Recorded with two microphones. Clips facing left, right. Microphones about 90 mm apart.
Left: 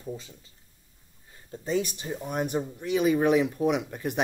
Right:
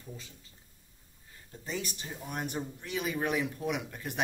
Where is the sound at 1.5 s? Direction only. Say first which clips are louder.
Left 10 dB; 25° left (ahead or behind).